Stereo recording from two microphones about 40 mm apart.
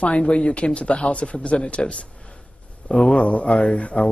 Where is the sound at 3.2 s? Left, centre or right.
Left.